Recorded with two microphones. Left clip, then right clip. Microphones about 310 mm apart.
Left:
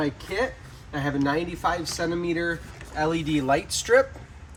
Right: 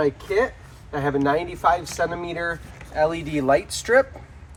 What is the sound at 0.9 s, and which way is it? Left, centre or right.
Speech, centre.